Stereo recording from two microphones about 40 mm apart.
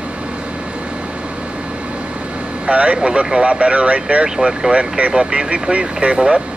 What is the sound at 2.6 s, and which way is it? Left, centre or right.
Speech, right.